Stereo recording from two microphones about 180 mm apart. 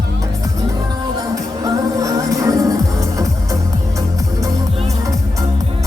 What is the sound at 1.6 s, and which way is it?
Music, 20° right (ahead or behind).